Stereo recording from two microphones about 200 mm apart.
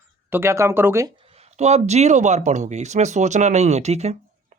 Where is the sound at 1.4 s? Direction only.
35° right (ahead or behind).